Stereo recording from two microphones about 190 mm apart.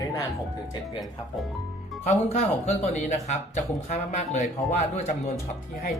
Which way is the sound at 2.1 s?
35° left (ahead or behind).